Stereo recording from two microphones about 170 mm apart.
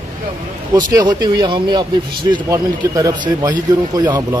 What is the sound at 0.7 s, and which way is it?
Speech, 25° right (ahead or behind).